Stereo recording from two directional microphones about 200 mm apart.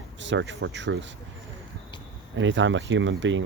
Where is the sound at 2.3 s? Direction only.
70° right (ahead or behind).